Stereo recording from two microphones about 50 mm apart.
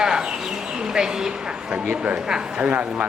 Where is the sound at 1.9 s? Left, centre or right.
Right.